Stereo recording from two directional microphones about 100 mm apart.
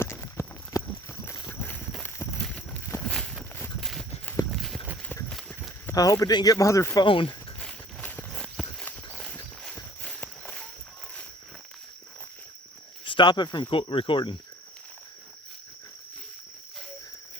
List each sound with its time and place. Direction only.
0.0 s clip-clop: 25° left (ahead or behind)
1.5 s walk: 20° left (ahead or behind)
2.4 s clip-clop: 10° left (ahead or behind)
2.8 s walk: 25° left (ahead or behind)
3.8 s horse: centre (ahead or behind)
4.5 s clip-clop: centre (ahead or behind)
5.3 s run: 5° left (ahead or behind)
5.9 s speech: 35° left (ahead or behind)
7.1 s speech: 60° left (ahead or behind)
7.6 s walk: 10° left (ahead or behind)
8.6 s horse: centre (ahead or behind)
10.0 s walk: 10° left (ahead or behind)
13.1 s speech: 50° left (ahead or behind)